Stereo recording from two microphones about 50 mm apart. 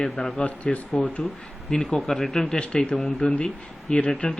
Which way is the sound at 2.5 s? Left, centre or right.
Centre.